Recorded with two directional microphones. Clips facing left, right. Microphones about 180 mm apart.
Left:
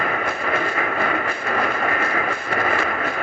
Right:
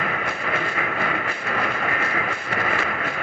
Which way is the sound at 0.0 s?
45° left (ahead or behind).